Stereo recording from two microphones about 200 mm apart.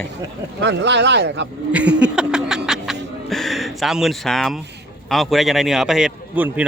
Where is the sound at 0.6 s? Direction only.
60° right (ahead or behind).